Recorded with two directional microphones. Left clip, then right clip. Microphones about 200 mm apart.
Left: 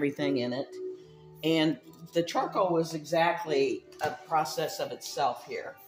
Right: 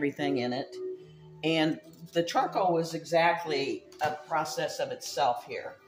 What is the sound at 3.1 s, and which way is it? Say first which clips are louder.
Speech: right 2 dB; 15° left (ahead or behind).